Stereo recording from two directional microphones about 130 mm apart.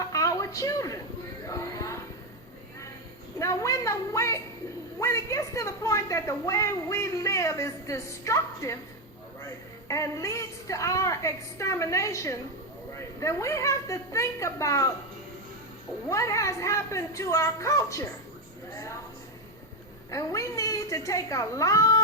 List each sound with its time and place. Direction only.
0.0 s a sound: 25° left (ahead or behind)
1.5 s music: 25° left (ahead or behind)
3.3 s a woman's voice: 25° left (ahead or behind)
9.9 s a woman's voice: 25° left (ahead or behind)
16.0 s a woman's voice: 25° left (ahead or behind)
20.1 s a woman's voice: 25° left (ahead or behind)